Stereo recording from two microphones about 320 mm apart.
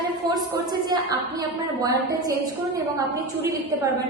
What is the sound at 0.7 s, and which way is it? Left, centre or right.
A woman's voice, centre.